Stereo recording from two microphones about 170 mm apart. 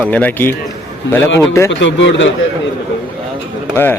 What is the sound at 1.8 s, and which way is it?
Speech, 90° left.